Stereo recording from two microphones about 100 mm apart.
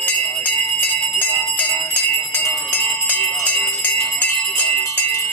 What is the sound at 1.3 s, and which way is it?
Jingle bell, 15° left (ahead or behind).